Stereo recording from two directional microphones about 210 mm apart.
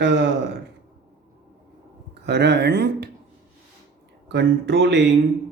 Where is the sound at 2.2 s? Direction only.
55° right (ahead or behind).